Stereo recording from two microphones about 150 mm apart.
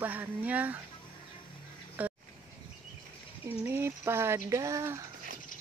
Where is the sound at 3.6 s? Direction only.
15° right (ahead or behind).